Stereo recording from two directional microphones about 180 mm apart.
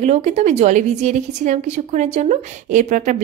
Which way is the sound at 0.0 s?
40° right (ahead or behind).